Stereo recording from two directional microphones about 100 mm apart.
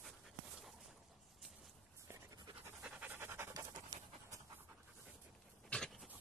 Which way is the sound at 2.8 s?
15° right (ahead or behind).